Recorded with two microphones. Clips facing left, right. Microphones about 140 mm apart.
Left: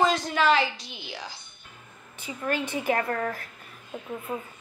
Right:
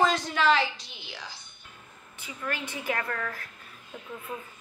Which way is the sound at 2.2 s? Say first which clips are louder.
Left 6 dB; 25° left (ahead or behind).